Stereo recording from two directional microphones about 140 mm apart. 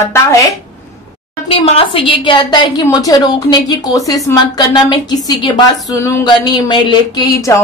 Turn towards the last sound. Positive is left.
turn(degrees=20)  # may be behind; listen again after turning